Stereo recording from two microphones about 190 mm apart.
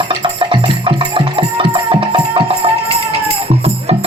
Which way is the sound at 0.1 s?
25° right (ahead or behind).